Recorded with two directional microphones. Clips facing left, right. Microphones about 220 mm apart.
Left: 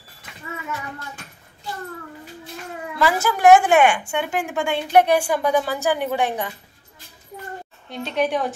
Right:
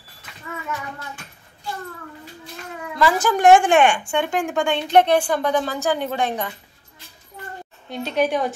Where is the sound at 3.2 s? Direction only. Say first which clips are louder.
Even; 5° left (ahead or behind).